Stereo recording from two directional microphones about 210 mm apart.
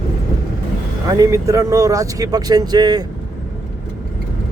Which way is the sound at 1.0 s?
15° right (ahead or behind).